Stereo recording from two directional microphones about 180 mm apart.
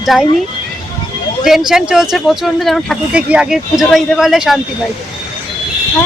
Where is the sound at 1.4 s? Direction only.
Centre (ahead or behind).